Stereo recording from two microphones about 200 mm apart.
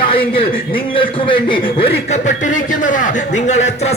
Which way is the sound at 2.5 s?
40° left (ahead or behind).